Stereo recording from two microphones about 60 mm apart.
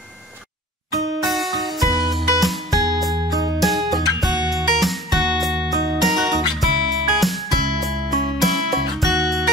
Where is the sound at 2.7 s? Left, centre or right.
Right.